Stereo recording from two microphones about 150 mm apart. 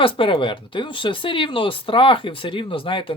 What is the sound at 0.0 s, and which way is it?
Speech, 35° left (ahead or behind).